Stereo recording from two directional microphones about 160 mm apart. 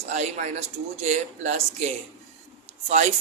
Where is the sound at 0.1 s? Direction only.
45° right (ahead or behind).